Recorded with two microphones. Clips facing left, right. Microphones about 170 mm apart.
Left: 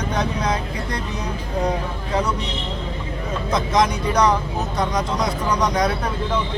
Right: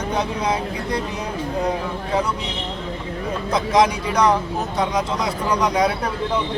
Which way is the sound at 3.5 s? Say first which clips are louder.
Right 2 dB; 5° right (ahead or behind).